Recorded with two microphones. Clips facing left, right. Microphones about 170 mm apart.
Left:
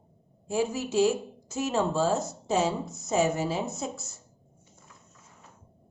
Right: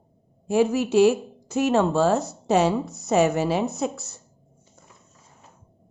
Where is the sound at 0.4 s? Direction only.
65° right (ahead or behind).